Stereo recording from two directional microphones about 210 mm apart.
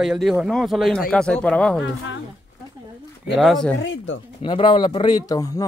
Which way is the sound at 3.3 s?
Centre (ahead or behind).